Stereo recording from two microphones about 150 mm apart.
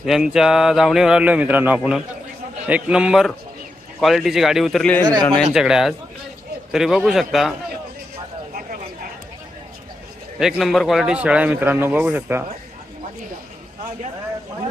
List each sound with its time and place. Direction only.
0.0 s a man's voice: 5° right (ahead or behind)
10.3 s a man's voice: centre (ahead or behind); by 12.5 s 15° right (ahead or behind)